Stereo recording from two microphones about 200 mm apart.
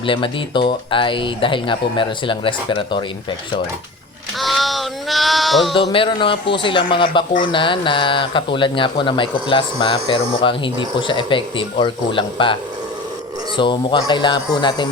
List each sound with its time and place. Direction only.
0.0 s speech: 25° left (ahead or behind)
4.4 s sheep: centre (ahead or behind)
5.9 s speech: 25° left (ahead or behind)
13.6 s speech: 25° left (ahead or behind)